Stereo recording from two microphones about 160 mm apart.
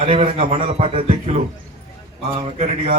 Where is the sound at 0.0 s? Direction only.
40° right (ahead or behind).